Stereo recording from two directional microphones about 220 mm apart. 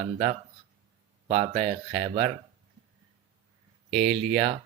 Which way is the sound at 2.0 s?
25° right (ahead or behind).